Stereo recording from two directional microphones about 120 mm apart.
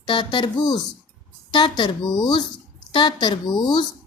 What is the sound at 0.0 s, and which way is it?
A woman's voice, 40° left (ahead or behind).